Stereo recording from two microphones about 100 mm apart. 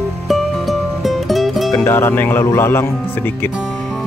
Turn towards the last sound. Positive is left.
turn(degrees=25)  # may be behind; listen again after turning